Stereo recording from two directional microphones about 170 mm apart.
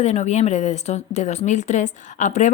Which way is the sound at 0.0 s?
40° left (ahead or behind).